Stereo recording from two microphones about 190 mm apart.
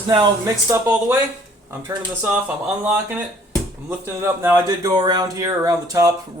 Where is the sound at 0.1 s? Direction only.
20° right (ahead or behind).